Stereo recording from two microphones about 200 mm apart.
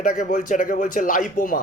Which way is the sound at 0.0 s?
40° left (ahead or behind).